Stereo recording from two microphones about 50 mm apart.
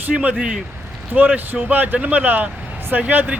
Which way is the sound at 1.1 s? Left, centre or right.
Right.